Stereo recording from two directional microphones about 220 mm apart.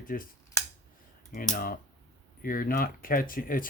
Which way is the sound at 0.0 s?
40° left (ahead or behind).